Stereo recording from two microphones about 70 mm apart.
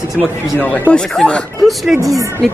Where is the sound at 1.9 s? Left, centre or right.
Right.